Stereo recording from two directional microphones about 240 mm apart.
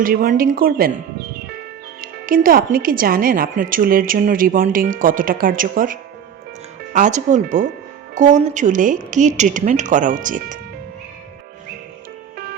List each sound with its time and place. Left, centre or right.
0.0 s speech: right